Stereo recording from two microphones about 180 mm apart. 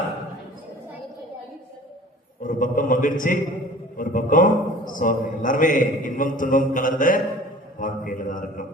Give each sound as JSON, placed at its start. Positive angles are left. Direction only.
{"t": 2.4, "sound": "a man's voice", "side_deg": 50}